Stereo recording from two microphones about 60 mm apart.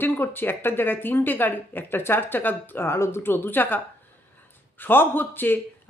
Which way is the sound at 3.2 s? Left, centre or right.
Left.